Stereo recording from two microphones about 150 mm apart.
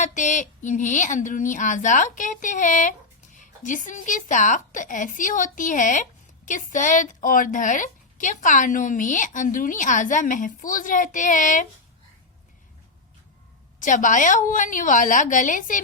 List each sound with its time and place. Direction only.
0.0 s a woman's voice: 55° left (ahead or behind)
13.7 s a woman's voice: 60° left (ahead or behind)